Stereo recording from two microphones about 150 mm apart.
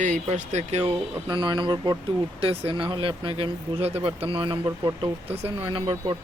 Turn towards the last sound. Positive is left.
turn(degrees=-35)  # may be behind; listen again after turning